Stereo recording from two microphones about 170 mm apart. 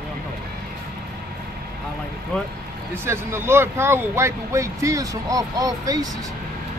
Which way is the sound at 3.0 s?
15° right (ahead or behind).